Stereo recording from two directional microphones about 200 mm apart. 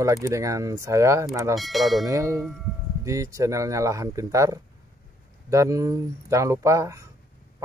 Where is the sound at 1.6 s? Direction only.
Centre (ahead or behind).